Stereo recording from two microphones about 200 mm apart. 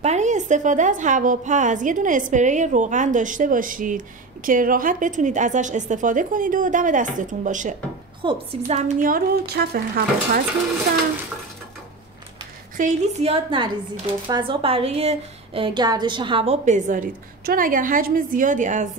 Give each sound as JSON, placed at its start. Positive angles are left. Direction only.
{"t": 0.0, "sound": "a woman's voice", "side_deg": -35}
{"t": 12.7, "sound": "a woman's voice", "side_deg": -35}